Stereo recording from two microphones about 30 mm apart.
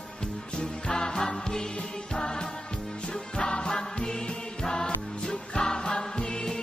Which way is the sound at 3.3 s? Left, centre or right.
Left.